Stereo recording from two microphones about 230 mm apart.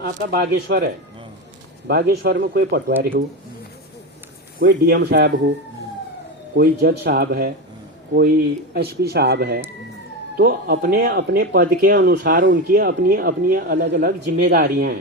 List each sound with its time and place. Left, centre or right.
0.0 s speech: right
1.9 s speech: right
4.6 s speech: right
6.6 s speech: right
8.7 s speech: right